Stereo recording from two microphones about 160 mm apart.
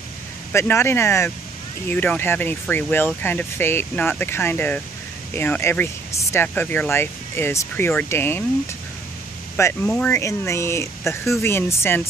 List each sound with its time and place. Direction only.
0.5 s speech: 15° left (ahead or behind)
9.8 s speech: 10° left (ahead or behind)